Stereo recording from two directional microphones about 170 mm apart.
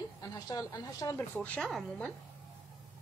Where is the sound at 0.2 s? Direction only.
20° left (ahead or behind).